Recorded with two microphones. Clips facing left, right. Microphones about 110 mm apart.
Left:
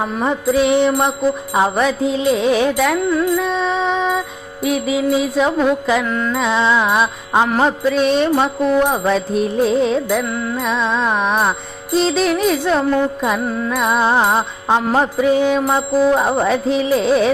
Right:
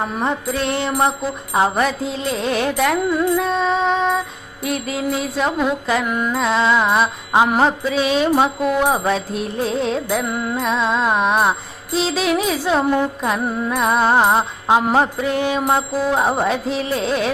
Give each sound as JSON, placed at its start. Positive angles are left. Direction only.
{"t": 0.0, "sound": "mantra", "side_deg": 0}
{"t": 3.1, "sound": "music", "side_deg": -15}
{"t": 3.4, "sound": "music", "side_deg": 0}
{"t": 4.6, "sound": "mantra", "side_deg": 0}
{"t": 6.1, "sound": "music", "side_deg": -15}
{"t": 6.4, "sound": "mantra", "side_deg": 0}
{"t": 10.2, "sound": "music", "side_deg": -20}
{"t": 10.6, "sound": "mantra", "side_deg": 0}